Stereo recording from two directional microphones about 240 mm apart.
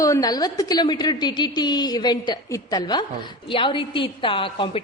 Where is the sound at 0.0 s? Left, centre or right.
Centre.